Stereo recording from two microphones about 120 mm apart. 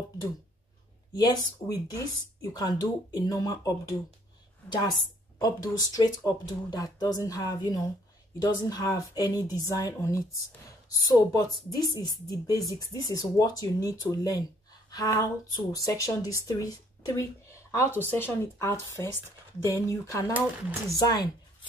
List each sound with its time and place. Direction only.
1.1 s speech: 35° left (ahead or behind)